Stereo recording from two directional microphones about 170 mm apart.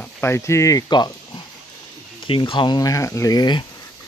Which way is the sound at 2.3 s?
30° left (ahead or behind).